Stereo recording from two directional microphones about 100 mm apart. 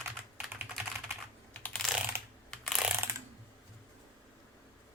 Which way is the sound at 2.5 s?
5° left (ahead or behind).